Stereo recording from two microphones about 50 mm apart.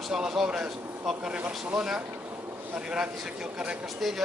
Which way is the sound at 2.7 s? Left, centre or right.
Centre.